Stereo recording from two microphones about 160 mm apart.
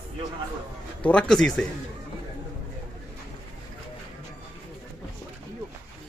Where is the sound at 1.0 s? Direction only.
5° left (ahead or behind).